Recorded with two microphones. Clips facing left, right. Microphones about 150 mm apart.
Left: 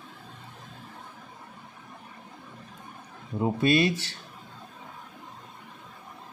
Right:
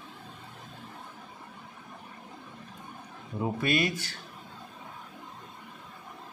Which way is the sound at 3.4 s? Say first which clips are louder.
Left 5 dB; 25° left (ahead or behind).